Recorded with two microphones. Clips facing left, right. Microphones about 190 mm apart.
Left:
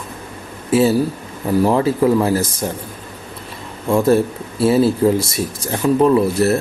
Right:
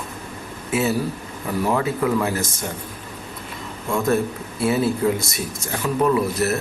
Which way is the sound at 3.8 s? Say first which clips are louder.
Left 6 dB; 30° left (ahead or behind).